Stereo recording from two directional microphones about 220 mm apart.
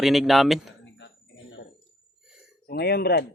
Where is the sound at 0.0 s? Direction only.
Centre (ahead or behind).